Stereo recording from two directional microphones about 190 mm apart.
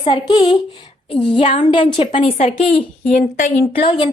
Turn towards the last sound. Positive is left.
turn(degrees=25)  # may be behind; listen again after turning